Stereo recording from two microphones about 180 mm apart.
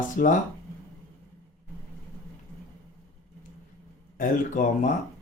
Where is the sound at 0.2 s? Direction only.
50° left (ahead or behind).